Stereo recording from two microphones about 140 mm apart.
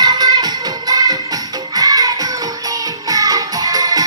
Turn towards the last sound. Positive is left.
turn(degrees=-25)  # may be behind; listen again after turning